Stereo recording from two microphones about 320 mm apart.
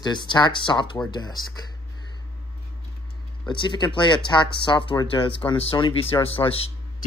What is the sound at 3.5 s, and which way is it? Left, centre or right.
Speech, centre.